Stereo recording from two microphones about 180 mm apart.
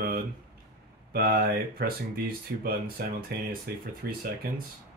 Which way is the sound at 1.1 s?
60° right (ahead or behind).